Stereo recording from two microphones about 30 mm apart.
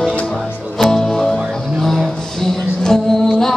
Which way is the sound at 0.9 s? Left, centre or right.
Centre.